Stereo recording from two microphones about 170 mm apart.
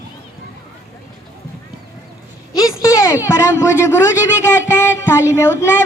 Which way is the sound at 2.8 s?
20° left (ahead or behind).